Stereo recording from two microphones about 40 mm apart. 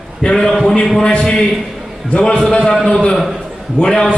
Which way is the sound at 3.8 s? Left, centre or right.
Centre.